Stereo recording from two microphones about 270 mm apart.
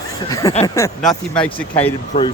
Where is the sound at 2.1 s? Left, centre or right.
Left.